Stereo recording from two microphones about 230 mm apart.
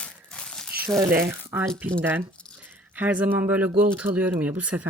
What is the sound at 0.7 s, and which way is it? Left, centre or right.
Speech, centre.